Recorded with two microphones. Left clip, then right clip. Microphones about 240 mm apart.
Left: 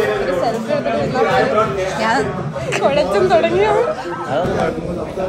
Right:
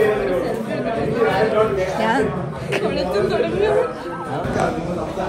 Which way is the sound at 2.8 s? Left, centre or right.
Left.